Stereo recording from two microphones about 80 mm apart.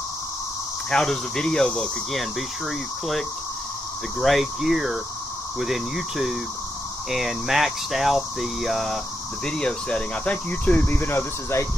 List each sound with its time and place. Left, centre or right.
0.8 s speech: centre; by 11.6 s left